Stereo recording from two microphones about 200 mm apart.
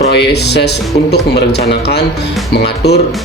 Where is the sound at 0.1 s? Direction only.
55° left (ahead or behind).